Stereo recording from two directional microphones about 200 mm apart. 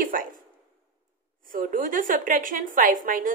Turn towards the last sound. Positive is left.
turn(degrees=-40)  # may be behind; listen again after turning